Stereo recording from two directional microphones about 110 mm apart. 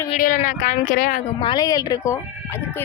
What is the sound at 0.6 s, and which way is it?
Speech, 90° left.